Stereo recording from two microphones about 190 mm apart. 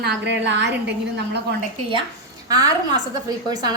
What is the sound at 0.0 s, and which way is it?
A woman's voice, 65° right (ahead or behind).